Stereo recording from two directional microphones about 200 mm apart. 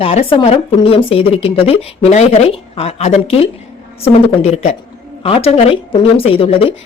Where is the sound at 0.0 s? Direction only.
30° left (ahead or behind).